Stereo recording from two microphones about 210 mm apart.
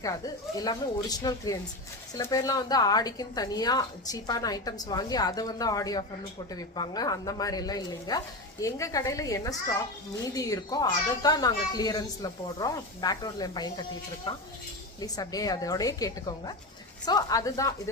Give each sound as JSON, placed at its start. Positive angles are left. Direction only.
{"t": 0.0, "sound": "speech", "side_deg": 15}